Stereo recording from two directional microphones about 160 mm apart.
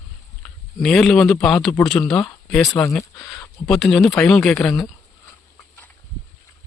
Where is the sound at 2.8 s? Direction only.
20° left (ahead or behind).